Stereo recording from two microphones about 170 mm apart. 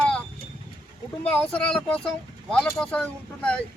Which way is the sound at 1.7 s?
5° left (ahead or behind).